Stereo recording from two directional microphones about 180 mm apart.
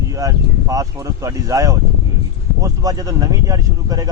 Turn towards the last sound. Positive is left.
turn(degrees=-20)  # may be behind; listen again after turning